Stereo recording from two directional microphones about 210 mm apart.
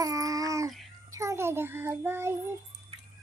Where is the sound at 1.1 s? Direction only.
15° right (ahead or behind).